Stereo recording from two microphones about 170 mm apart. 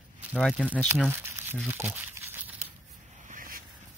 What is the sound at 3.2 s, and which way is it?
Vehicle, 50° right (ahead or behind).